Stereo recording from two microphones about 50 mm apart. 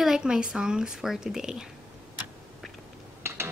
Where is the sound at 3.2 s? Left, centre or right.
Right.